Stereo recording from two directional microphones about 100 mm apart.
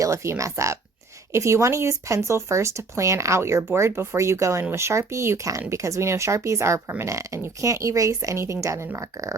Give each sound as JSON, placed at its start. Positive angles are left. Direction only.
{"t": 0.0, "sound": "speech", "side_deg": -30}